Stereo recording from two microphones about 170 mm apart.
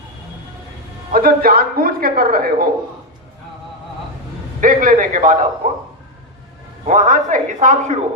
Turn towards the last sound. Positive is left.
turn(degrees=-50)  # may be behind; listen again after turning